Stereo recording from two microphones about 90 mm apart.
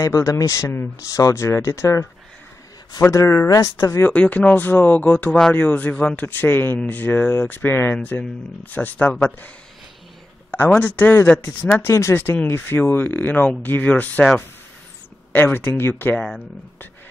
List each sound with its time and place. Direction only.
0.0 s speech: 40° left (ahead or behind)
3.1 s speech: 35° left (ahead or behind)
4.1 s speech: 15° left (ahead or behind)
10.5 s a woman's voice: 20° left (ahead or behind)
11.9 s speech: 30° left (ahead or behind)
15.3 s speech: 25° left (ahead or behind)
16.2 s speech: 5° left (ahead or behind)